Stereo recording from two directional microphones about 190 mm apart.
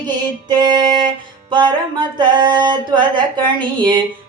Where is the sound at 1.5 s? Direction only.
25° right (ahead or behind).